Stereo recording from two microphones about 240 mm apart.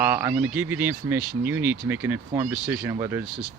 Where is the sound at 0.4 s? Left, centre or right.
Centre.